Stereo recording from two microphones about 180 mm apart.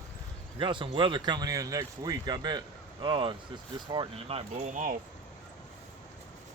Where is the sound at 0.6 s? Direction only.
25° right (ahead or behind); by 4.9 s 45° right (ahead or behind).